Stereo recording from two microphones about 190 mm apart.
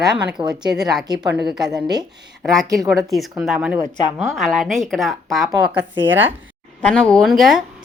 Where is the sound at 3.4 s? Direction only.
Centre (ahead or behind).